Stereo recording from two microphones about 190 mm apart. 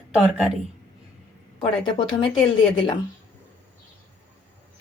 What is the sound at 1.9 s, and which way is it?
Speech, 25° left (ahead or behind).